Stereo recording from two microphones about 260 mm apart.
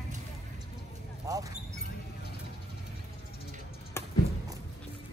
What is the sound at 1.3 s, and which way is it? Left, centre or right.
Speech, centre.